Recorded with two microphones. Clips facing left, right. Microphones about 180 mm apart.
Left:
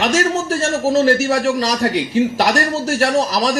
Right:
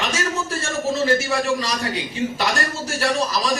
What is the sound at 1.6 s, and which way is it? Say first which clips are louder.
Speech: left 7 dB; 80° left.